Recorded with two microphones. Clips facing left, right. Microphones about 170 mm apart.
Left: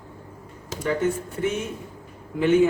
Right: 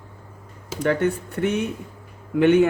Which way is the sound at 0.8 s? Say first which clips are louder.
Right 3 dB; 65° right (ahead or behind).